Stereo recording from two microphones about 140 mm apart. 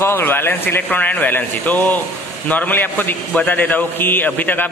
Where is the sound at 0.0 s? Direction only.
15° left (ahead or behind).